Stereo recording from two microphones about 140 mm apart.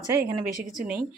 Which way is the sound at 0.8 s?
5° right (ahead or behind).